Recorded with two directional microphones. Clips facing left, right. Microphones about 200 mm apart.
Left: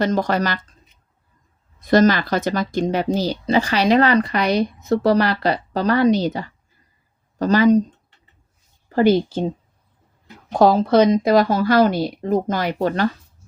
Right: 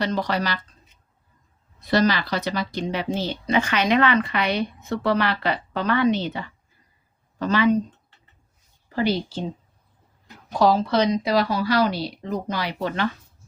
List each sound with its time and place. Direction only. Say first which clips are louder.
0.0 s a woman's voice: left 5 dB; 45° left (ahead or behind)
1.8 s speech: left 6 dB; 45° left (ahead or behind)
8.9 s a woman's voice: left 8 dB; 50° left (ahead or behind)
10.5 s a woman's voice: left 5 dB; 50° left (ahead or behind)